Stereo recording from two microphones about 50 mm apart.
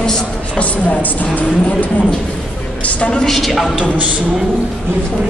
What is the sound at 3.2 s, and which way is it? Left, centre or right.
Speech, centre.